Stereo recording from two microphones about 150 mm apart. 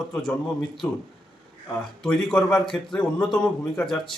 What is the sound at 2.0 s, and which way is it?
A man's voice, 5° left (ahead or behind).